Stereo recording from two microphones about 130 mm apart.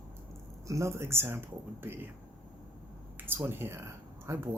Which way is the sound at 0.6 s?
25° right (ahead or behind).